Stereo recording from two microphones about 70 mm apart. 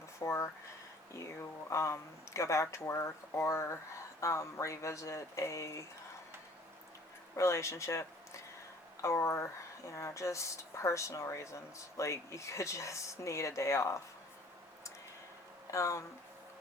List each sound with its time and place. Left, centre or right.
0.2 s speech: left
1.7 s speech: left
7.3 s speech: left
15.7 s speech: left